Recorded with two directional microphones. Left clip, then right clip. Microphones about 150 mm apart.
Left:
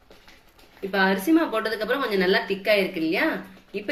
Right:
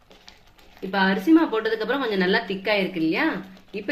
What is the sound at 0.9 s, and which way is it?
A woman's voice, 85° right.